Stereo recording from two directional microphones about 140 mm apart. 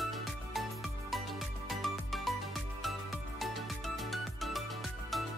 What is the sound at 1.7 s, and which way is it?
Music, centre (ahead or behind).